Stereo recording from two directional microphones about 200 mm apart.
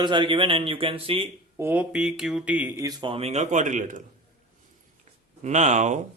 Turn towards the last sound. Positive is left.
turn(degrees=-35)  # may be behind; listen again after turning